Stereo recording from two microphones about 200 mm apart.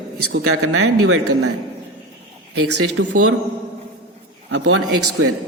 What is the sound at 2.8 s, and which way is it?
Speech, 90° right.